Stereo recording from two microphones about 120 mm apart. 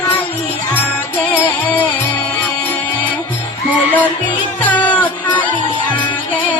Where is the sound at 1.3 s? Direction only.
15° left (ahead or behind).